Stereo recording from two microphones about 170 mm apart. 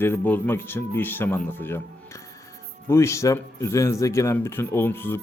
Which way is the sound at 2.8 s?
15° left (ahead or behind).